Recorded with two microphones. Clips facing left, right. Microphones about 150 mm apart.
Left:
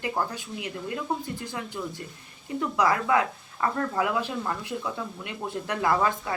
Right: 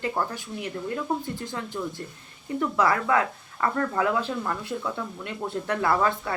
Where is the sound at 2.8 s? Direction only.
20° left (ahead or behind).